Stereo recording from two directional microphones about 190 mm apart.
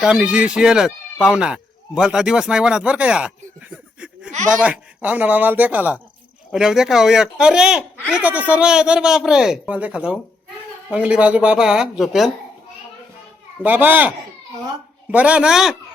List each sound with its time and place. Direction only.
0.0 s speech: 5° right (ahead or behind)
4.5 s speech: 5° right (ahead or behind)
13.6 s speech: 10° right (ahead or behind)
15.1 s speech: 5° right (ahead or behind)